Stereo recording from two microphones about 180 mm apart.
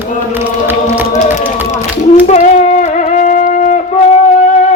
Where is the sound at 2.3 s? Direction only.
40° left (ahead or behind).